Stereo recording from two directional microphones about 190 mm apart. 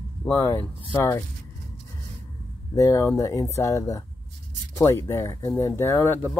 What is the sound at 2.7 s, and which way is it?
Speech, 15° left (ahead or behind).